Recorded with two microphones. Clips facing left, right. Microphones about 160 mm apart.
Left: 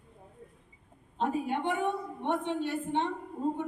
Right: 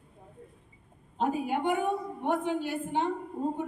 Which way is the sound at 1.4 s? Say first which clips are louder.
Right 3 dB; 5° right (ahead or behind).